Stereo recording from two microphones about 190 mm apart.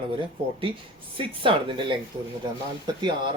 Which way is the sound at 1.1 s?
25° right (ahead or behind).